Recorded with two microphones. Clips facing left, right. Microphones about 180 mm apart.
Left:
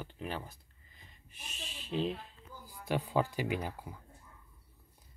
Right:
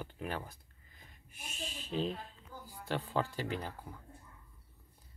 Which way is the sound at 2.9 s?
15° left (ahead or behind).